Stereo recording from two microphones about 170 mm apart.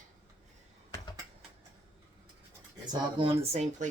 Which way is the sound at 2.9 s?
30° right (ahead or behind).